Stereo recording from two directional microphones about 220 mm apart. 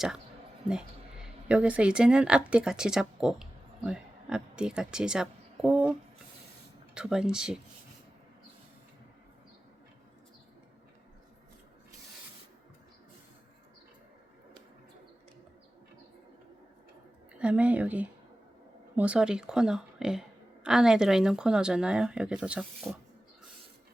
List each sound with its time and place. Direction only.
0.7 s a woman's voice: 5° right (ahead or behind)
6.9 s speech: 5° right (ahead or behind)
17.3 s speech: 5° right (ahead or behind)